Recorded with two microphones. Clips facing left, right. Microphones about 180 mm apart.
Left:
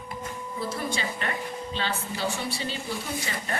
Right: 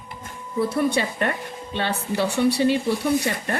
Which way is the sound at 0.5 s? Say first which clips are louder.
Right 11 dB; 65° right (ahead or behind).